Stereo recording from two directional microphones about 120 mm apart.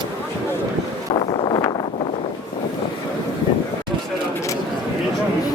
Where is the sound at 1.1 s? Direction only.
45° left (ahead or behind).